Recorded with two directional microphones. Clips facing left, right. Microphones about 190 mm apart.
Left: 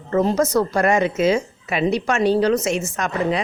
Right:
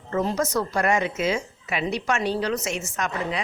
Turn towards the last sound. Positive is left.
turn(degrees=35)  # may be behind; listen again after turning